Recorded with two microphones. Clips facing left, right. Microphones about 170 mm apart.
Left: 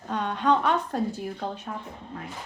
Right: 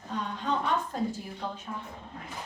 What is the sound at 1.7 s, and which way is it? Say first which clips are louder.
Speech: left 3 dB; 90° left.